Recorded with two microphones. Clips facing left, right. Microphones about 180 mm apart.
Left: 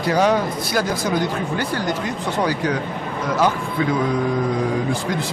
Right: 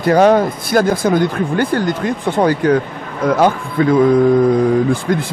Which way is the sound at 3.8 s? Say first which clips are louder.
Right 8 dB; 50° right (ahead or behind).